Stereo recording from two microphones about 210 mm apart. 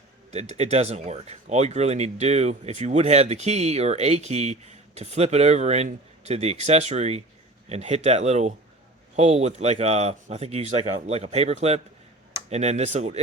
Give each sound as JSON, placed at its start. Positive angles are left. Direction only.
{"t": 0.3, "sound": "speech", "side_deg": -30}